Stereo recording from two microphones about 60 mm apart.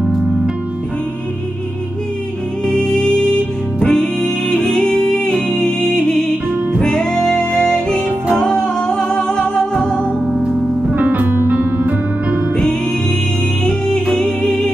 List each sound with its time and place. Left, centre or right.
2.6 s music: centre
10.3 s music: centre
11.0 s music: right
13.7 s music: centre